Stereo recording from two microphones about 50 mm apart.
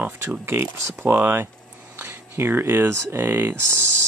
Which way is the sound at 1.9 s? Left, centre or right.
Right.